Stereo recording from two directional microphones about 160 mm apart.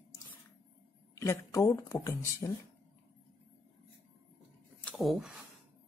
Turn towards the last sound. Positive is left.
turn(degrees=-5)  # may be behind; listen again after turning